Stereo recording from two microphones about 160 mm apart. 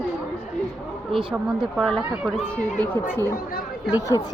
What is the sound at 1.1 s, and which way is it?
Speech, 5° right (ahead or behind).